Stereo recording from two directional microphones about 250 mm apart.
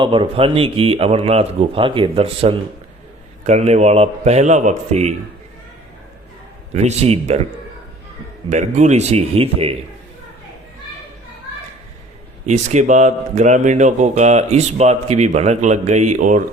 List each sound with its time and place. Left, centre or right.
0.0 s speech: centre
6.7 s speech: right
8.4 s speech: right
12.5 s speech: right